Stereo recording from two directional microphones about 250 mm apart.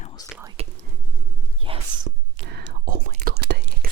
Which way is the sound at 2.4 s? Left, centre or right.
Right.